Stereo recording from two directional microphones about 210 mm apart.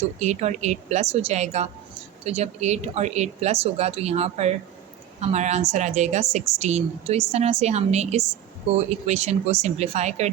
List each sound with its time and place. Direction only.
0.2 s a woman's voice: 35° right (ahead or behind)